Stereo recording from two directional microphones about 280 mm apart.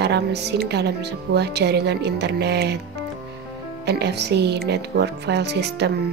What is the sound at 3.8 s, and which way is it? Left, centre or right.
Speech, right.